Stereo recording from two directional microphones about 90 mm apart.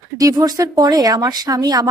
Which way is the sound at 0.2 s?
45° right (ahead or behind).